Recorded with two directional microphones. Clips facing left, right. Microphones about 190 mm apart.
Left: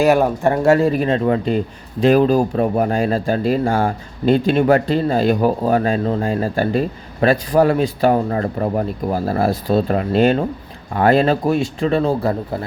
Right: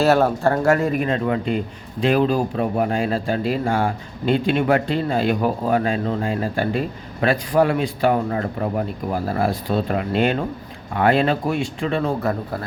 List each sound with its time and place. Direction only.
0.0 s speech: 15° left (ahead or behind); by 1.5 s 35° left (ahead or behind)
2.0 s speech: 45° left (ahead or behind)